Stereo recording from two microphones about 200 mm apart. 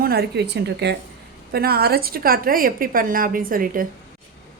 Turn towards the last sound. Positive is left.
turn(degrees=-45)  # may be behind; listen again after turning